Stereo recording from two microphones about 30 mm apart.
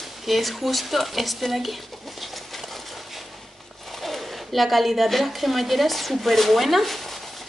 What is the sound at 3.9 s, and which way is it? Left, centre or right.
Speech, centre.